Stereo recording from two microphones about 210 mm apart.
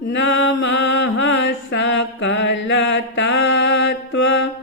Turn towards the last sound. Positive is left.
turn(degrees=55)  # may be behind; listen again after turning